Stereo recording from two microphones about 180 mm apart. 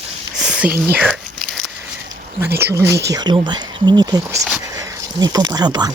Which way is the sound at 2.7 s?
15° right (ahead or behind).